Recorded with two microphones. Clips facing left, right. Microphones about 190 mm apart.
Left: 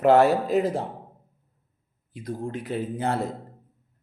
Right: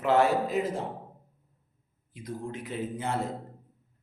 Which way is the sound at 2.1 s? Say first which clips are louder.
Left 5 dB; 30° left (ahead or behind).